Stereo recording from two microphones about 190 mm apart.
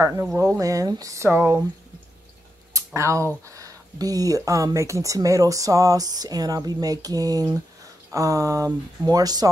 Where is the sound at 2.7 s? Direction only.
15° right (ahead or behind).